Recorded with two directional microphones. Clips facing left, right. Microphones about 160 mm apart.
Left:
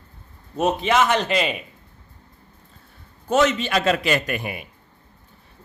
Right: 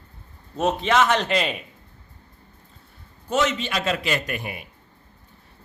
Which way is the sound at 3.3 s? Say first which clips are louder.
Left 4 dB; 45° left (ahead or behind).